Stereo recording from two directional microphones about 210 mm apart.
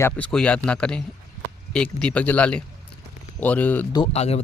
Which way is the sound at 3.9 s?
25° left (ahead or behind).